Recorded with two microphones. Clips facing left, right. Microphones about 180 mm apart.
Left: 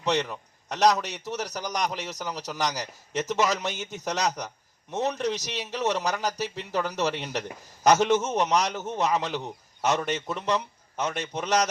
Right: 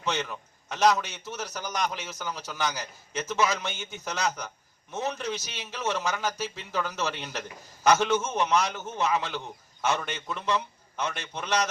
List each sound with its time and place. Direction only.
0.0 s a man's voice: 40° left (ahead or behind)